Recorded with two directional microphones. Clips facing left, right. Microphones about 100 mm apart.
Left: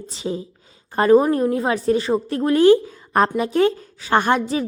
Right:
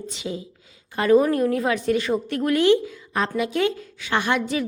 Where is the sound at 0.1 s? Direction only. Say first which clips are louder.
Left 7 dB; 35° left (ahead or behind).